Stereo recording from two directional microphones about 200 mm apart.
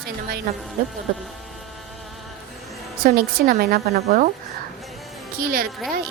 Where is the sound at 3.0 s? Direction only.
45° right (ahead or behind).